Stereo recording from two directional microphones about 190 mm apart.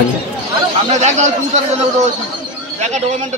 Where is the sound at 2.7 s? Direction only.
35° right (ahead or behind).